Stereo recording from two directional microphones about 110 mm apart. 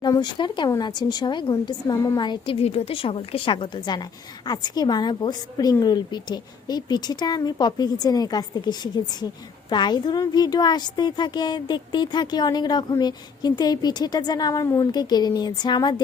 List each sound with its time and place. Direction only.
0.0 s a woman's voice: 40° left (ahead or behind)
2.6 s a woman's voice: 65° left (ahead or behind); by 16.0 s 40° left (ahead or behind)